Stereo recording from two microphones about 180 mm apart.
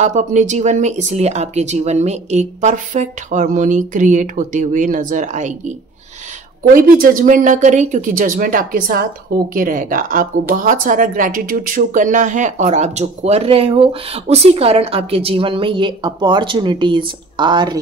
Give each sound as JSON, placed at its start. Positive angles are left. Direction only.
{"t": 0.0, "sound": "speech", "side_deg": -40}
{"t": 6.7, "sound": "a woman's voice", "side_deg": -50}